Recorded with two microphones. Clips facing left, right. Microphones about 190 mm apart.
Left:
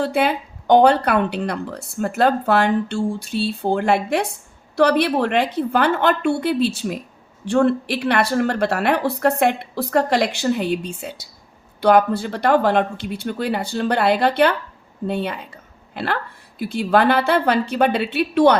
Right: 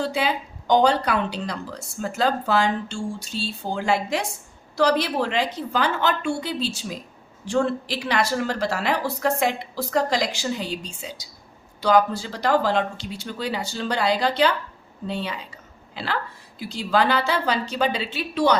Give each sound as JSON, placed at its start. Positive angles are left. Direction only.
{"t": 0.0, "sound": "a woman's voice", "side_deg": 55}